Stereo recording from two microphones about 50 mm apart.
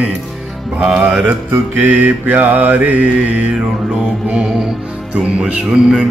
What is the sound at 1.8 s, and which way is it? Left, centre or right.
Mantra, right.